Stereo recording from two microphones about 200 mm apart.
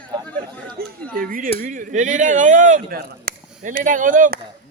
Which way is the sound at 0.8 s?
50° right (ahead or behind).